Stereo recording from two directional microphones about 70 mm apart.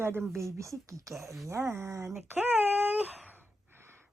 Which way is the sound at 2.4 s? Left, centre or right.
Right.